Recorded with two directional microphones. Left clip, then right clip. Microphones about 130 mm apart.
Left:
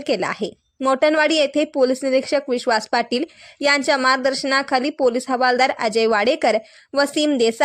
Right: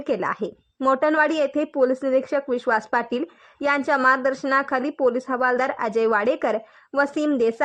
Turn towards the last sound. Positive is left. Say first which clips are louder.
# left 3 dB
turn(degrees=25)  # may be behind; listen again after turning